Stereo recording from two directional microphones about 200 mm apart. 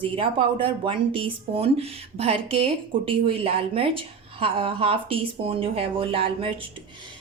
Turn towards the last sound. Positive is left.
turn(degrees=-25)  # may be behind; listen again after turning